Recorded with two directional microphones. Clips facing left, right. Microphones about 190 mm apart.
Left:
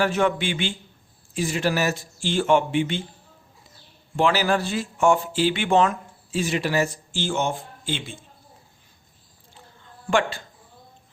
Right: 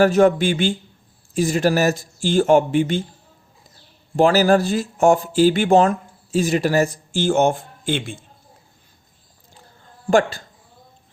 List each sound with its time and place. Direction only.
0.0 s speech: 40° right (ahead or behind)
4.2 s speech: 40° right (ahead or behind)
9.8 s a sound: 40° right (ahead or behind)